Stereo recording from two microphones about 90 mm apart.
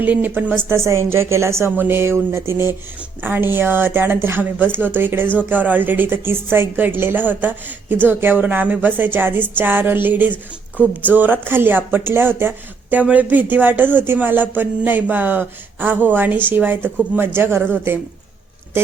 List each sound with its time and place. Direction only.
0.0 s a woman's voice: 20° right (ahead or behind)